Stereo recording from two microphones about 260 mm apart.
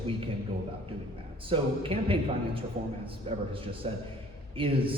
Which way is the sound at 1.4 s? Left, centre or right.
Right.